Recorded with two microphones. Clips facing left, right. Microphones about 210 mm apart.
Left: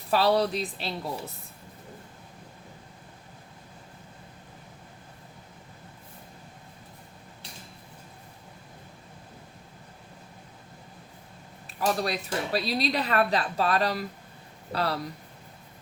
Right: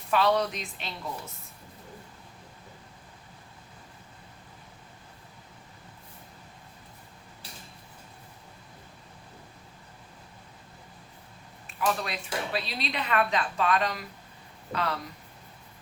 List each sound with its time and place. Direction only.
0.1 s speech: 35° left (ahead or behind)
11.8 s speech: 35° left (ahead or behind)